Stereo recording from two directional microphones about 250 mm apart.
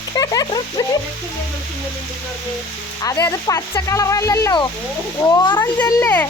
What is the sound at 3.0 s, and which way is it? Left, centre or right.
Speech, centre.